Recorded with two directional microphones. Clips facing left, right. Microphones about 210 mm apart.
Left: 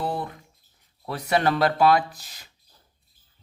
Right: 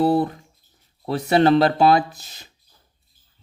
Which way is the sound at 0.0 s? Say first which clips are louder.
Right 11 dB; 35° right (ahead or behind).